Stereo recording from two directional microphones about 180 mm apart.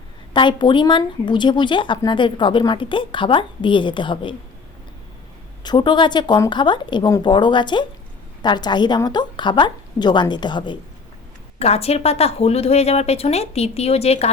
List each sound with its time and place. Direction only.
0.3 s speech: 25° left (ahead or behind)
5.6 s speech: 25° left (ahead or behind)